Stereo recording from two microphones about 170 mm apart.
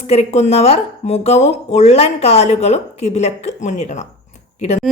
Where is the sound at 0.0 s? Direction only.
40° left (ahead or behind).